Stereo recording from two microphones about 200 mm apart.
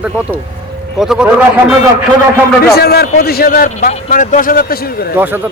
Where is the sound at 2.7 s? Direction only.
50° left (ahead or behind).